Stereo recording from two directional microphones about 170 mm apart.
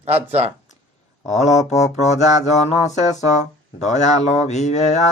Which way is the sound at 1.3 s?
40° left (ahead or behind).